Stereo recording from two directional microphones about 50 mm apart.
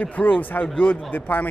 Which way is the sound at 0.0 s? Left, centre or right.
Left.